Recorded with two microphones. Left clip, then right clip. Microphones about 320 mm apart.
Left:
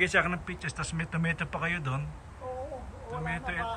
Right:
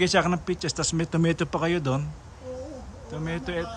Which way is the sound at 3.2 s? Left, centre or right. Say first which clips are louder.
Right 3 dB; centre.